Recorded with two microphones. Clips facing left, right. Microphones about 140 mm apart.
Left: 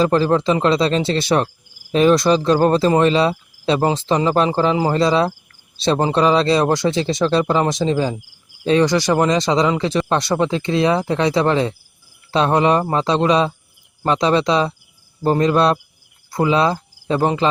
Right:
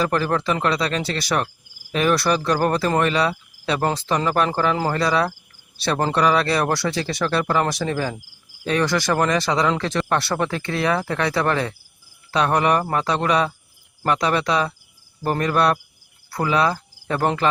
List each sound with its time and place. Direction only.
0.0 s speech: 25° left (ahead or behind)
3.0 s cricket: 25° left (ahead or behind)
3.8 s speech: 20° left (ahead or behind)
16.3 s cricket: 20° left (ahead or behind)